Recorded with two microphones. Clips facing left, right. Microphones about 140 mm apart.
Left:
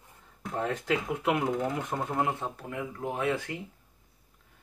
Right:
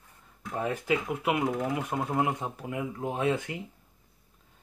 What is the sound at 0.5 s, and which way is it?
Speech, 10° right (ahead or behind).